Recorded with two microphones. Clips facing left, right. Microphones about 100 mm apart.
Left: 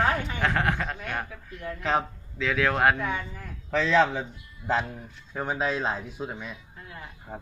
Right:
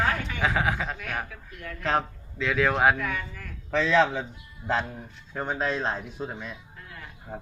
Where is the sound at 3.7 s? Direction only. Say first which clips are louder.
Even; centre (ahead or behind).